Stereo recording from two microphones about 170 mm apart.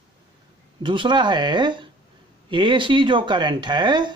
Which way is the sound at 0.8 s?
30° right (ahead or behind).